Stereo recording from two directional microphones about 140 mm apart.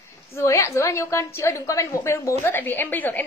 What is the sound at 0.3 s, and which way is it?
A woman's voice, 20° left (ahead or behind).